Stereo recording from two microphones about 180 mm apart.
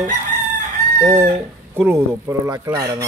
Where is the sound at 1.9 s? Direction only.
15° right (ahead or behind).